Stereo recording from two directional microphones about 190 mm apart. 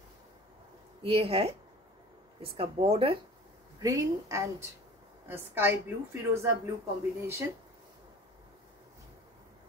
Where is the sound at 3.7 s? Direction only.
20° right (ahead or behind).